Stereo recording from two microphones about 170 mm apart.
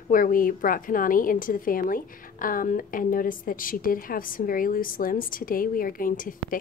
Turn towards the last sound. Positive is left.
turn(degrees=55)  # may be behind; listen again after turning